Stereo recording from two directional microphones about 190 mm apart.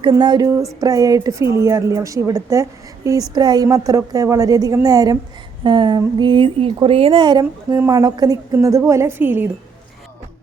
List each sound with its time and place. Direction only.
0.0 s a woman's voice: 25° right (ahead or behind)